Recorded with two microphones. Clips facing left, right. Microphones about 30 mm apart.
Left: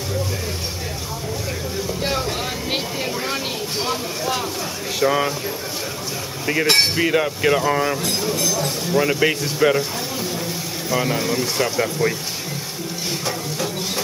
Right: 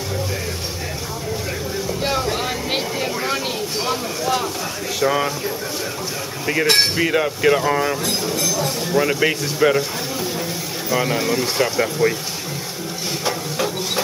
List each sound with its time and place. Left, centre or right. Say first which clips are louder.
2.0 s vehicle: right 3 dB; centre
3.8 s cutlery: right 1 dB; centre
6.4 s cutlery: even; centre
10.9 s speech: right 1 dB; centre
13.2 s a sound: right 6 dB; centre